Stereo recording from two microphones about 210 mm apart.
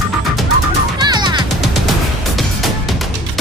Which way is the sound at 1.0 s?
20° right (ahead or behind).